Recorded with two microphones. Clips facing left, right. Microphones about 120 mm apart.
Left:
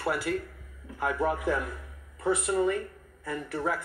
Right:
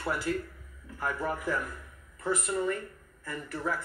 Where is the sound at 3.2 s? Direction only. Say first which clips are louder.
Left 4 dB; 70° left (ahead or behind).